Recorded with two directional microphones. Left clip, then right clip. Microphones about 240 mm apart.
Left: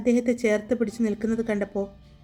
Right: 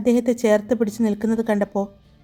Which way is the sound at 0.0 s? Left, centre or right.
Right.